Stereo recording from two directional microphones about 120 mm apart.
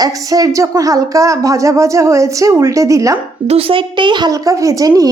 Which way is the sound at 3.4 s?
55° right (ahead or behind).